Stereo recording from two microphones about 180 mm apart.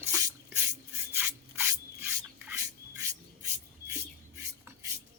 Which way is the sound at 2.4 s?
15° right (ahead or behind).